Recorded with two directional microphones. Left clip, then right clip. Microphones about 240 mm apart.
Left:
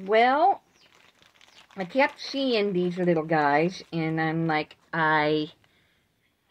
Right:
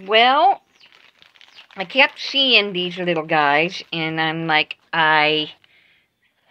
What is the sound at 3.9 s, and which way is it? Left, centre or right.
Speech, centre.